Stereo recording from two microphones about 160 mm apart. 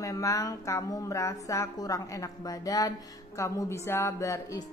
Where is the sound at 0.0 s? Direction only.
20° left (ahead or behind).